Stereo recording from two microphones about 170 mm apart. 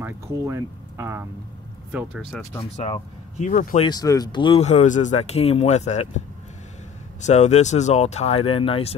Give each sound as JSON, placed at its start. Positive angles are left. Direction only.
{"t": 0.0, "sound": "speech", "side_deg": -15}
{"t": 1.9, "sound": "speech", "side_deg": -5}
{"t": 2.7, "sound": "speech", "side_deg": 40}
{"t": 3.8, "sound": "speech", "side_deg": 20}
{"t": 4.6, "sound": "speech", "side_deg": 45}
{"t": 7.2, "sound": "speech", "side_deg": 40}